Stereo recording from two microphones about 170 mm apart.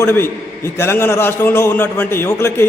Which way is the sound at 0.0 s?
15° left (ahead or behind).